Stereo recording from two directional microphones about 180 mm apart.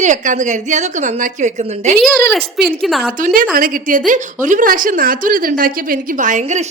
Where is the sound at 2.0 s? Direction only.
Centre (ahead or behind).